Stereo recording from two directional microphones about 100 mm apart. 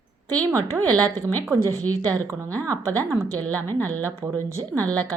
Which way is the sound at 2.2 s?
30° right (ahead or behind).